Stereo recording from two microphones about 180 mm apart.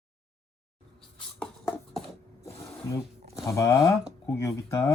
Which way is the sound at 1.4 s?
10° left (ahead or behind).